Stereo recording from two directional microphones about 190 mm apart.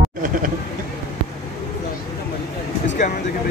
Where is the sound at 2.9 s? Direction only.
40° left (ahead or behind).